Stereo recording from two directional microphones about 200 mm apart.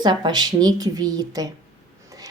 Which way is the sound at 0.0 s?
20° right (ahead or behind).